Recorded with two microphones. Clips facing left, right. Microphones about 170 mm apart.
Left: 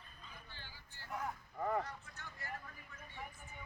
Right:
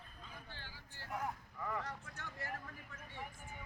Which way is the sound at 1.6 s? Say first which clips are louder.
Left 7 dB; 40° left (ahead or behind).